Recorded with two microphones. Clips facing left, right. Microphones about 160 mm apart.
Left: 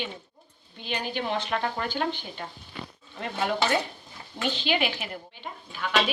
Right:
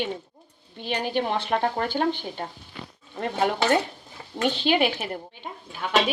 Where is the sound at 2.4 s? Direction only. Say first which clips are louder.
Right 4 dB; 35° right (ahead or behind).